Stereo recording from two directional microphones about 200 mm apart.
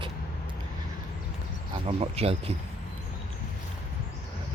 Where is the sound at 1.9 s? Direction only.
30° right (ahead or behind).